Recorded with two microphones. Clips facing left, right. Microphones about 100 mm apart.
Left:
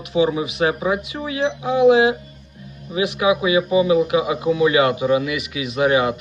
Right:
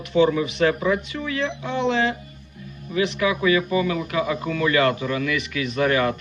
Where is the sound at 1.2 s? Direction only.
40° left (ahead or behind).